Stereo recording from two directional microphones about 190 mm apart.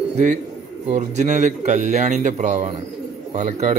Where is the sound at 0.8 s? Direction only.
40° right (ahead or behind).